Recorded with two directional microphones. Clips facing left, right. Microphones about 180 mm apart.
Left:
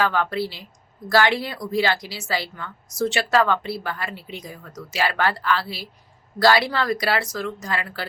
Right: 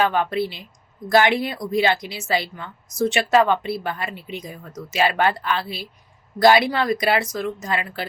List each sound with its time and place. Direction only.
0.0 s a woman's voice: 20° right (ahead or behind)